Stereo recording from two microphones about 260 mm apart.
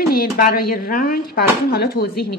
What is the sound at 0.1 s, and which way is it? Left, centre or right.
Speech, left.